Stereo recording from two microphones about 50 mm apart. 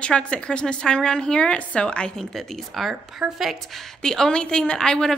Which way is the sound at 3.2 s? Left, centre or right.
Centre.